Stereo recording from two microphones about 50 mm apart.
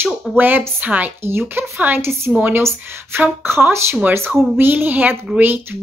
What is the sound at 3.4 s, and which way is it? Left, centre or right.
Speech, right.